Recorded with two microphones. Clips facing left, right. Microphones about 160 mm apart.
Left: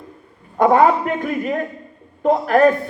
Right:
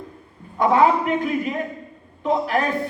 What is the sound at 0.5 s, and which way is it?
Speech, 50° left (ahead or behind).